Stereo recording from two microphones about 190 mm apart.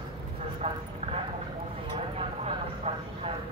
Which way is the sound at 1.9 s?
30° right (ahead or behind).